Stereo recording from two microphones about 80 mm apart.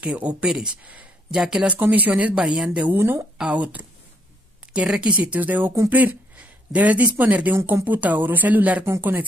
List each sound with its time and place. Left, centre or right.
0.0 s speech: centre
2.9 s speech: right